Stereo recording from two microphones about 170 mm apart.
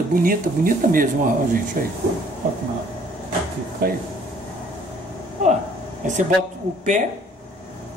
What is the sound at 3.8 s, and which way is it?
Speech, 60° right (ahead or behind).